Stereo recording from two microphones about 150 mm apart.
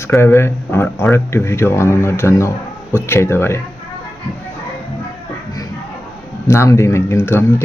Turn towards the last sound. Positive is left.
turn(degrees=15)  # may be behind; listen again after turning